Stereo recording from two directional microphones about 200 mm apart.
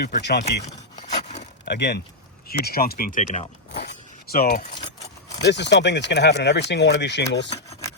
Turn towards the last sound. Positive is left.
turn(degrees=60)  # may be behind; listen again after turning